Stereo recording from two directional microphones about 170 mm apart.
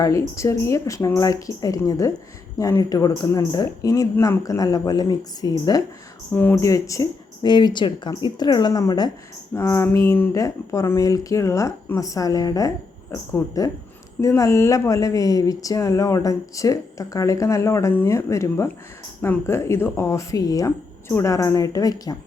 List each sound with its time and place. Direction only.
0.0 s a woman's voice: 20° left (ahead or behind)
6.3 s a woman's voice: 10° left (ahead or behind)